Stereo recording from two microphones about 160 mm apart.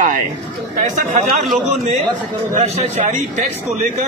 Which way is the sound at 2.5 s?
45° right (ahead or behind).